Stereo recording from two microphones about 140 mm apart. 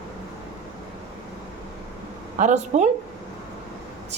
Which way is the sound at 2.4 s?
55° right (ahead or behind).